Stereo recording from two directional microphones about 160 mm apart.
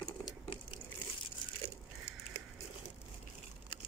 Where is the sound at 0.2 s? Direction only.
35° left (ahead or behind).